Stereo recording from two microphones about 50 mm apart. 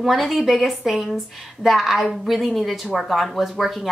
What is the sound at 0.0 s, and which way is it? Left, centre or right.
Speech, centre.